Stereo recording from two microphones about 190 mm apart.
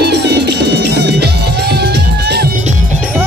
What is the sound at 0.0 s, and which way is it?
Music, 60° right (ahead or behind).